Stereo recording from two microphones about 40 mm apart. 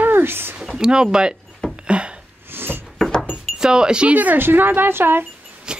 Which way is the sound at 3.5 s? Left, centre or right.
Centre.